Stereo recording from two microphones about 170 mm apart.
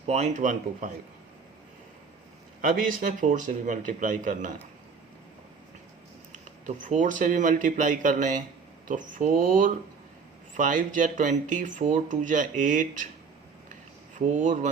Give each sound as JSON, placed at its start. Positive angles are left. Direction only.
{"t": 0.1, "sound": "speech", "side_deg": -45}
{"t": 2.6, "sound": "speech", "side_deg": -55}
{"t": 6.7, "sound": "speech", "side_deg": -50}
{"t": 14.2, "sound": "speech", "side_deg": -45}